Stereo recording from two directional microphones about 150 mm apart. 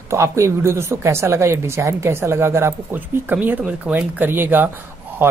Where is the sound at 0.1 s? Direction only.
20° right (ahead or behind).